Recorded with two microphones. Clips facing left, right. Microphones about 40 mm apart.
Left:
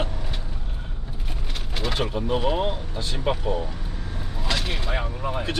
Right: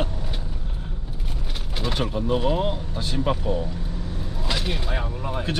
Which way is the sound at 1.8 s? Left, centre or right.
Centre.